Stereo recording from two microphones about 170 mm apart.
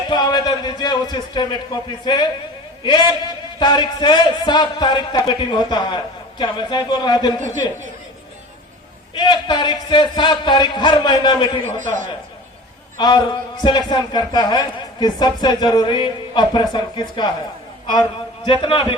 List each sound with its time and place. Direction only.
0.1 s a man's voice: 25° left (ahead or behind)
9.1 s a man's voice: 25° left (ahead or behind)
11.8 s a man's voice: 50° right (ahead or behind)
13.0 s a man's voice: 25° left (ahead or behind)
18.4 s a man's voice: 30° left (ahead or behind)